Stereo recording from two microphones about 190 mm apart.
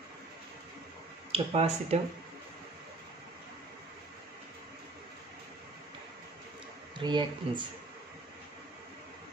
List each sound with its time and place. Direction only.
1.3 s speech: 30° right (ahead or behind)
7.0 s speech: 25° right (ahead or behind)